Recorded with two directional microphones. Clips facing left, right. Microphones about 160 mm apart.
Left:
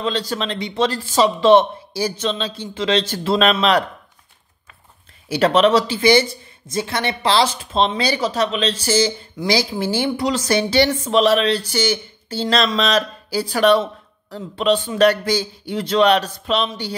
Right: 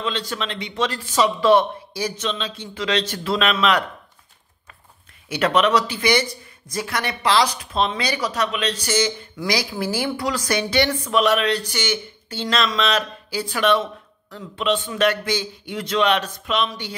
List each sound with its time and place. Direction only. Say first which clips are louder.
0.0 s speech: left 4 dB; 35° left (ahead or behind)
5.3 s speech: left 4 dB; 30° left (ahead or behind)